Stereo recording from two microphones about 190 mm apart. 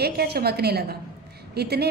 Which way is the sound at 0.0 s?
55° right (ahead or behind).